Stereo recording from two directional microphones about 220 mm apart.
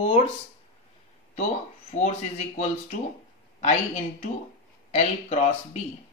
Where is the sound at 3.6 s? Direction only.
30° left (ahead or behind).